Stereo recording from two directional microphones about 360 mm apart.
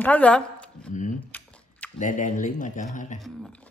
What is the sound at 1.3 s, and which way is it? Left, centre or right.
Biting, centre.